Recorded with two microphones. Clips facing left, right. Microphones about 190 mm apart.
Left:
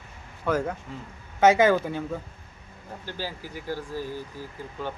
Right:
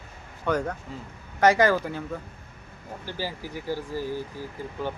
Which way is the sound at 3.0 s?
15° right (ahead or behind).